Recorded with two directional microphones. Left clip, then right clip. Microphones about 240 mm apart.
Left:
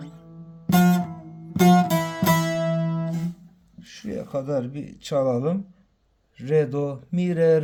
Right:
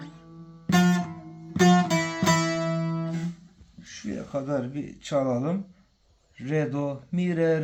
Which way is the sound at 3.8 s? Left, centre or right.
Left.